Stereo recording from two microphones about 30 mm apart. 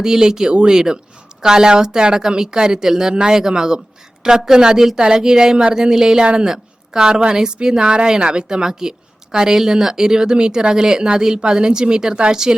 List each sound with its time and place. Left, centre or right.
0.0 s a woman's voice: right
0.5 s speech: right
1.4 s a woman's voice: right